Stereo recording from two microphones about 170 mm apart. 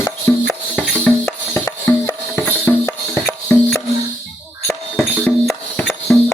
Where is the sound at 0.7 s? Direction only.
5° left (ahead or behind).